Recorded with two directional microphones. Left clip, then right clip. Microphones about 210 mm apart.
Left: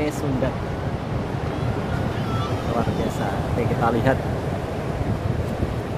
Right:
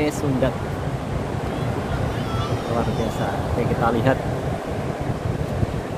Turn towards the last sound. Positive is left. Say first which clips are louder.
# right 1 dB
turn(degrees=0)  # may be behind; listen again after turning